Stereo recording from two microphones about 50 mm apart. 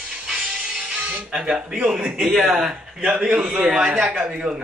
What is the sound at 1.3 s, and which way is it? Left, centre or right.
Speech, right.